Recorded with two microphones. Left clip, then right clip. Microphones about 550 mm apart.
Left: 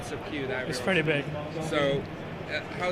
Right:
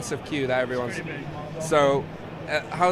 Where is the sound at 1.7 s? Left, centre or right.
Right.